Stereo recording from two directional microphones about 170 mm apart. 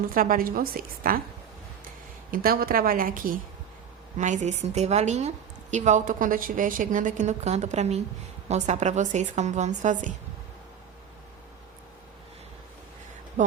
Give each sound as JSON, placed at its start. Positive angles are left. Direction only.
{"t": 0.1, "sound": "a woman's voice", "side_deg": -55}
{"t": 2.3, "sound": "a woman's voice", "side_deg": -60}